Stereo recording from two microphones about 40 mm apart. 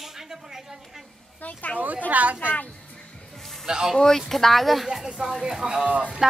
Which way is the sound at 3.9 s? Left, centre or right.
Centre.